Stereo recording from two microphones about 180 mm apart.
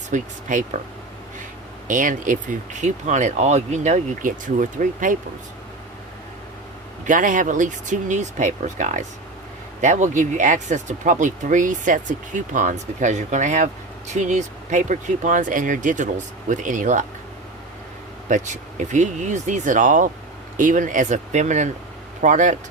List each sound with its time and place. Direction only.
0.1 s speech: 45° right (ahead or behind)
1.9 s speech: 45° right (ahead or behind)
7.1 s speech: 45° right (ahead or behind)
18.3 s speech: 40° right (ahead or behind)